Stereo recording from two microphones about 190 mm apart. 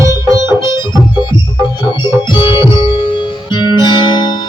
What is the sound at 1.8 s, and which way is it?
Organ, 25° left (ahead or behind).